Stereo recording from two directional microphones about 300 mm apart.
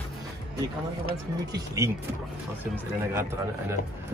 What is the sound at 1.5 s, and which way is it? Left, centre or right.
Speech, centre.